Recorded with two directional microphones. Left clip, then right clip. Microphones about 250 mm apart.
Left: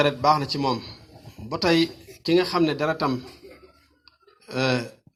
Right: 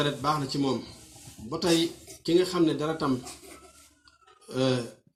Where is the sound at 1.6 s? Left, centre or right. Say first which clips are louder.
Left 4 dB; left.